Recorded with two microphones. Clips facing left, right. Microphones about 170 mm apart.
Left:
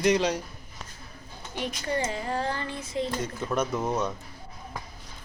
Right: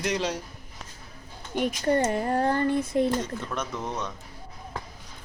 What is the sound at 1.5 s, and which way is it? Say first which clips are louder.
Speech: right 6 dB; 50° right (ahead or behind).